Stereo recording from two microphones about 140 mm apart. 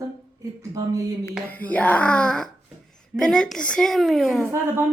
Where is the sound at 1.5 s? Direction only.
10° left (ahead or behind).